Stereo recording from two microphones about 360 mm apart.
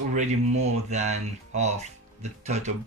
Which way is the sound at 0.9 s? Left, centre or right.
Centre.